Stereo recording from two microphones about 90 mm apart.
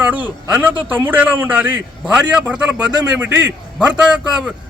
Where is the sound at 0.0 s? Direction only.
15° right (ahead or behind).